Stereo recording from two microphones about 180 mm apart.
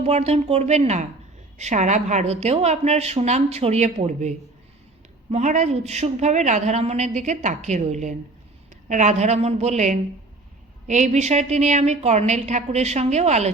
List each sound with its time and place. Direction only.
0.0 s a woman's voice: 35° right (ahead or behind)